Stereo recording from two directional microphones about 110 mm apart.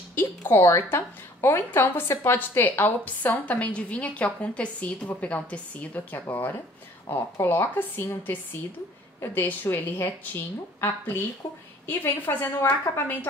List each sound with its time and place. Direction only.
0.1 s a woman's voice: 20° left (ahead or behind)